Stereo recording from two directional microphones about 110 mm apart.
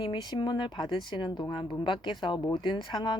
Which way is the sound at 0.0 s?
45° left (ahead or behind).